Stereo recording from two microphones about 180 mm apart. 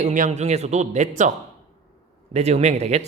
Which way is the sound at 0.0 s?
40° right (ahead or behind).